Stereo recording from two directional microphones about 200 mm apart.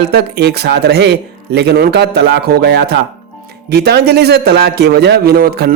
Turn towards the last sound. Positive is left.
turn(degrees=-50)  # may be behind; listen again after turning